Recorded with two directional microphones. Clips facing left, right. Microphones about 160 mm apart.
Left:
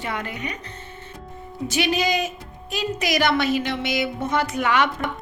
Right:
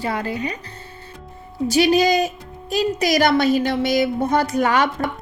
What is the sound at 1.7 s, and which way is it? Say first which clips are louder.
A woman's voice: right 7 dB; 35° right (ahead or behind).